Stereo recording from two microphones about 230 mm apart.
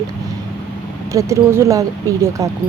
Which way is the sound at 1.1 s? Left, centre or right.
Centre.